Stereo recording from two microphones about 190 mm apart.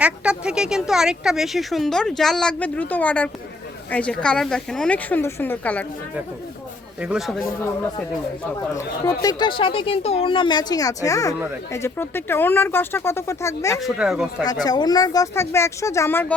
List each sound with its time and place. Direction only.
0.0 s speech: 5° right (ahead or behind)
7.0 s speech: 5° right (ahead or behind)
8.5 s speech: 15° left (ahead or behind)
13.8 s speech: 5° right (ahead or behind)
14.4 s speech: 20° left (ahead or behind)